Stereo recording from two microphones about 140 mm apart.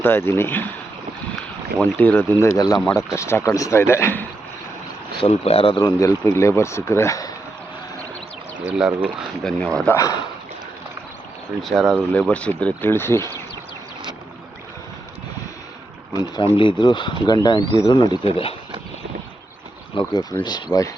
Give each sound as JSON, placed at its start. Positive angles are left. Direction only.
{"t": 0.0, "sound": "speech", "side_deg": 15}
{"t": 1.8, "sound": "speech", "side_deg": 10}
{"t": 5.2, "sound": "speech", "side_deg": 45}
{"t": 5.7, "sound": "speech", "side_deg": 20}
{"t": 8.6, "sound": "speech", "side_deg": -10}
{"t": 9.4, "sound": "speech", "side_deg": 5}
{"t": 9.9, "sound": "speech", "side_deg": 25}
{"t": 11.6, "sound": "speech", "side_deg": 0}
{"t": 12.3, "sound": "speech", "side_deg": 10}
{"t": 16.1, "sound": "speech", "side_deg": 35}
{"t": 20.3, "sound": "speech", "side_deg": 20}